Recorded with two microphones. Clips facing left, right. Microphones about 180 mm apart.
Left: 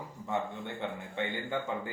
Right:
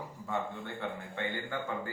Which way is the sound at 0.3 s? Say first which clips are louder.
Left 2 dB; 20° left (ahead or behind).